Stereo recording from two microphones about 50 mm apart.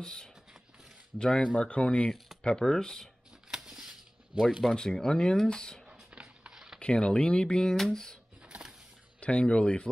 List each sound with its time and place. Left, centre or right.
0.0 s speech: centre
2.4 s speech: centre
3.4 s a sound: centre
4.4 s speech: centre
4.7 s speech: centre
6.0 s a sound: right
6.8 s speech: centre
8.4 s a sound: right
9.2 s speech: left